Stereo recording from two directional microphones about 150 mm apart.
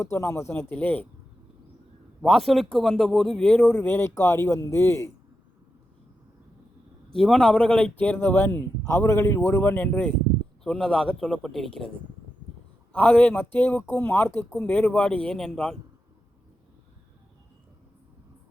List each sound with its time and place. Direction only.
0.0 s a man's voice: 20° left (ahead or behind)
2.2 s a man's voice: centre (ahead or behind); by 5.1 s 20° left (ahead or behind)
7.1 s a man's voice: 5° left (ahead or behind)
12.9 s a man's voice: 10° left (ahead or behind)